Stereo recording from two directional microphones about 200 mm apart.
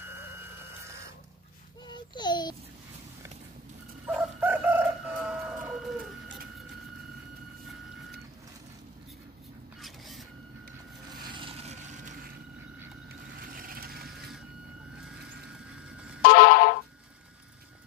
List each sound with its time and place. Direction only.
0.1 s alarm clock: 15° right (ahead or behind)
1.9 s babbling: 20° left (ahead or behind)
4.0 s chicken: 10° right (ahead or behind)
9.8 s vehicle: centre (ahead or behind)
11.2 s vehicle: 25° right (ahead or behind)
13.4 s a sound: 45° right (ahead or behind)
16.2 s a sound: 50° left (ahead or behind)